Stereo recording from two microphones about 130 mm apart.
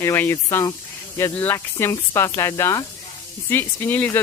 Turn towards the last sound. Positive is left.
turn(degrees=15)  # may be behind; listen again after turning